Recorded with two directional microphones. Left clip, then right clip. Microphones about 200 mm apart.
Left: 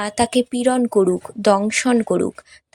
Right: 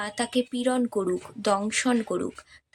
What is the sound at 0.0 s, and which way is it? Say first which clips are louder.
A woman's voice: left 9 dB; 40° left (ahead or behind).